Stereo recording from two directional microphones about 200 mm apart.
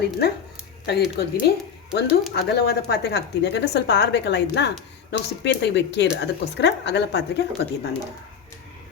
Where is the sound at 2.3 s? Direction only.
55° left (ahead or behind).